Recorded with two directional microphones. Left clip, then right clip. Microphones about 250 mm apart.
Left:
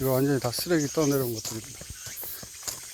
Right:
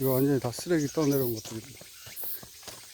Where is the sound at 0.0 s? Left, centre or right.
Centre.